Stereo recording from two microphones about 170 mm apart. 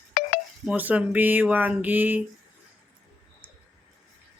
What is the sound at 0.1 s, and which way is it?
Telephone dialing, 50° left (ahead or behind).